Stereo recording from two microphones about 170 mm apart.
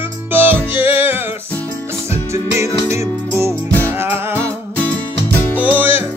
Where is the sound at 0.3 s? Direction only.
10° right (ahead or behind).